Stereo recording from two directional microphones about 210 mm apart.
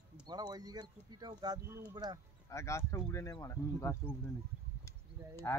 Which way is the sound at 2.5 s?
15° left (ahead or behind).